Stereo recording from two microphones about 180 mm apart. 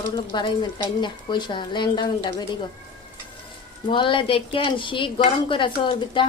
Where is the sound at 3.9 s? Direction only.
25° left (ahead or behind).